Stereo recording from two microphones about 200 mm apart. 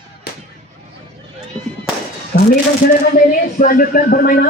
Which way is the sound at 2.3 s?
50° left (ahead or behind).